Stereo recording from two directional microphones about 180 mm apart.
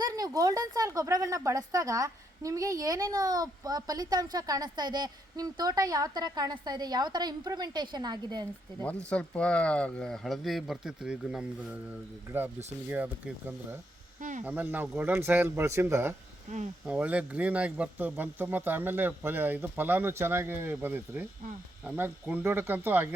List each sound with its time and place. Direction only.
0.0 s a woman's voice: 20° right (ahead or behind)
8.8 s speech: 5° left (ahead or behind)
12.9 s speech: 10° right (ahead or behind)
14.2 s speech: 45° right (ahead or behind)
14.4 s speech: 10° right (ahead or behind)
16.5 s speech: 40° right (ahead or behind)
16.8 s speech: 5° right (ahead or behind)